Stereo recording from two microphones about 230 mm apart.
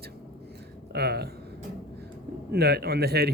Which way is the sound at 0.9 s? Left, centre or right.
Right.